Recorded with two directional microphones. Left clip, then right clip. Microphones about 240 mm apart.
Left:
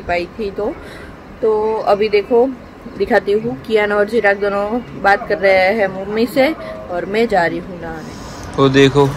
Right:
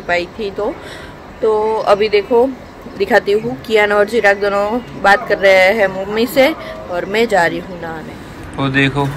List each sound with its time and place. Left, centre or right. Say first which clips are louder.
0.0 s speech: right 2 dB; centre
8.5 s speech: left 5 dB; centre